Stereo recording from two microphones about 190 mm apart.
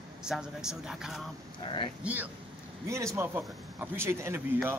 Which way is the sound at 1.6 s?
25° left (ahead or behind).